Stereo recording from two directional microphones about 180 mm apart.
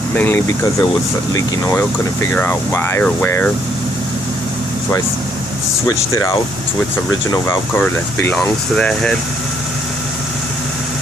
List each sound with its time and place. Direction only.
0.1 s speech: 10° left (ahead or behind)
6.1 s speech: 15° left (ahead or behind)